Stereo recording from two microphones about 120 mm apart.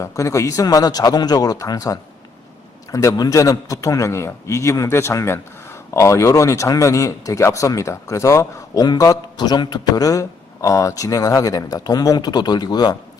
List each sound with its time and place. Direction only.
0.0 s speech: 25° left (ahead or behind)